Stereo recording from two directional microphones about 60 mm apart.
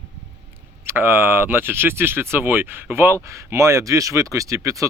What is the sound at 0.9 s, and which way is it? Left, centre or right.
Speech, right.